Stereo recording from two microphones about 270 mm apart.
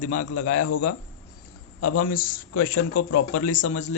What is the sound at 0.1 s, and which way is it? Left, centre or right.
Speech, left.